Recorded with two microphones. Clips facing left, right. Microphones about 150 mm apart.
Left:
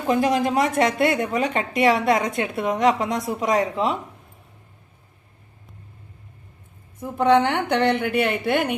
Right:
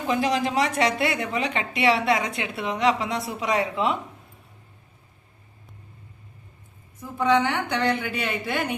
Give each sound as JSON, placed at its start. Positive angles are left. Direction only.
{"t": 0.1, "sound": "a woman's voice", "side_deg": 50}
{"t": 7.0, "sound": "a woman's voice", "side_deg": 55}